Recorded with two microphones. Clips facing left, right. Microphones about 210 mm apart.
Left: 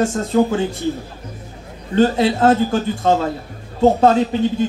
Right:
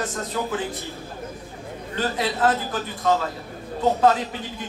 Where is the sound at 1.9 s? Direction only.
25° left (ahead or behind).